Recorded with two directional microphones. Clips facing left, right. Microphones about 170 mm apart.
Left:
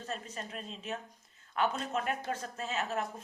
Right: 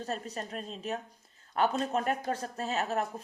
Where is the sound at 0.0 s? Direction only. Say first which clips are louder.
Right 4 dB; 40° right (ahead or behind).